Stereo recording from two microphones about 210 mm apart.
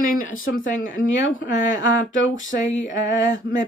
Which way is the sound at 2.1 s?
65° left (ahead or behind).